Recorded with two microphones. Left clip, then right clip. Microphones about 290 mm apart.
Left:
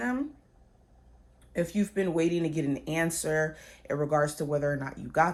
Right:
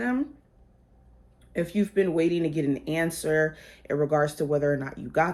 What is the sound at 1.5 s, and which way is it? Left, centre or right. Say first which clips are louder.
Speech: right 4 dB; left.